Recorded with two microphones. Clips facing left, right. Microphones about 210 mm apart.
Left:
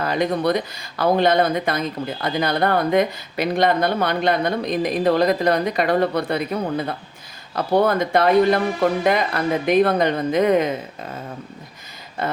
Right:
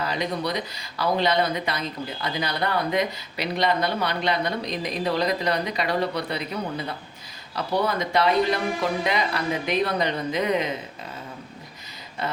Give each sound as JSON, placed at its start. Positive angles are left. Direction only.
{"t": 0.0, "sound": "speech", "side_deg": 50}